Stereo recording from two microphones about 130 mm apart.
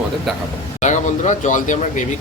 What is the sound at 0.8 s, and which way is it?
Speech, 65° left (ahead or behind).